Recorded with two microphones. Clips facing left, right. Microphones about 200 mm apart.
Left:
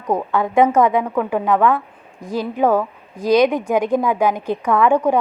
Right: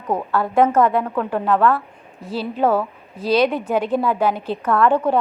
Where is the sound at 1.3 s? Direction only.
10° left (ahead or behind).